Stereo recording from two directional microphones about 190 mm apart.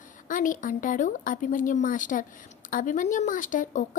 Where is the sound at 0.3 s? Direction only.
45° left (ahead or behind).